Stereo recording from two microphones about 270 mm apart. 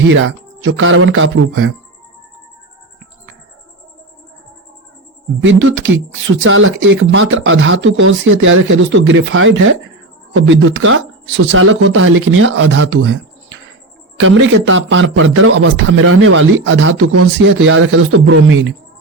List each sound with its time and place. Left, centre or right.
0.1 s a man's voice: right
5.4 s a man's voice: right
14.2 s a man's voice: right